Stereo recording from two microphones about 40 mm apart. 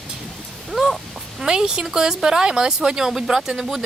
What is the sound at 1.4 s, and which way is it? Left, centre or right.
Speech, centre.